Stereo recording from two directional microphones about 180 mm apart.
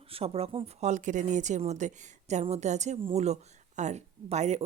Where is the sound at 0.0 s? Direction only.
30° right (ahead or behind).